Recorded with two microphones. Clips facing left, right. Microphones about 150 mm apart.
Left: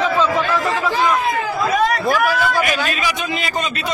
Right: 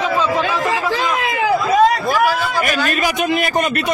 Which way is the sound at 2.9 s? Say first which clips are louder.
Right 5 dB; 55° right (ahead or behind).